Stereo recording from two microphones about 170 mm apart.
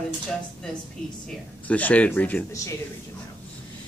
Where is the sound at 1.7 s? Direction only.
10° left (ahead or behind).